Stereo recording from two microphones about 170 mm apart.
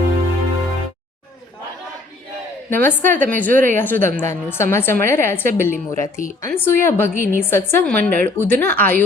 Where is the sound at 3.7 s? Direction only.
10° left (ahead or behind).